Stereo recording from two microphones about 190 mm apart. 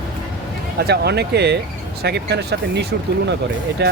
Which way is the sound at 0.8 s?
60° right (ahead or behind).